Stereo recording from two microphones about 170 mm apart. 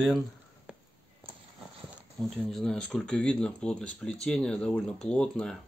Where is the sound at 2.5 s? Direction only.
5° left (ahead or behind).